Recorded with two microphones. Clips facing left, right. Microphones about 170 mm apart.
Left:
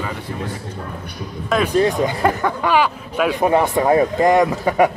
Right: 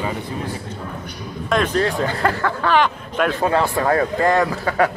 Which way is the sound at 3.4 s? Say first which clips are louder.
Left 4 dB; 20° left (ahead or behind).